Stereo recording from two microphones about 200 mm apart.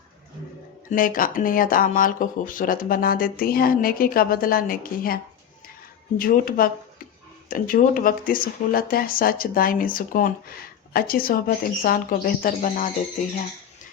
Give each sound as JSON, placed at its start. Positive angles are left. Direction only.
{"t": 0.9, "sound": "speech", "side_deg": 45}